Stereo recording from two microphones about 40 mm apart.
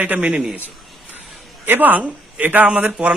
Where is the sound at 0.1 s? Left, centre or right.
Right.